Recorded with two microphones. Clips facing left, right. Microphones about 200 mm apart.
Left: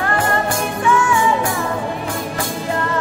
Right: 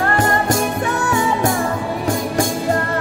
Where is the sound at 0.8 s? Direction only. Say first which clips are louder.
Left 3 dB; 40° right (ahead or behind).